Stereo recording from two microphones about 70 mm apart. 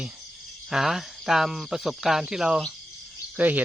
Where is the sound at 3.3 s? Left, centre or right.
Right.